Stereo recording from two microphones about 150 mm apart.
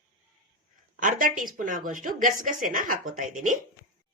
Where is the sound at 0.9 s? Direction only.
60° right (ahead or behind).